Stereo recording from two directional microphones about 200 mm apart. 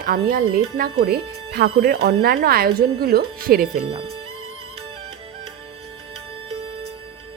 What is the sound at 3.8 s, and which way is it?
Speech, 25° right (ahead or behind).